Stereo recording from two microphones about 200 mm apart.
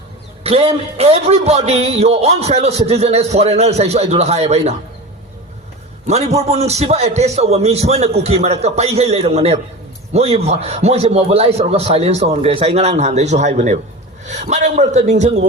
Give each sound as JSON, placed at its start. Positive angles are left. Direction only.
{"t": 0.4, "sound": "a man's voice", "side_deg": -30}
{"t": 6.1, "sound": "a man's voice", "side_deg": -35}